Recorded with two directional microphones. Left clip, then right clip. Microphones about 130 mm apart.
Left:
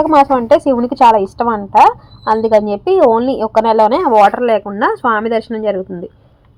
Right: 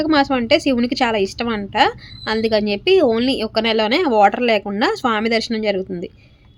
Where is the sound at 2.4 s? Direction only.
10° right (ahead or behind).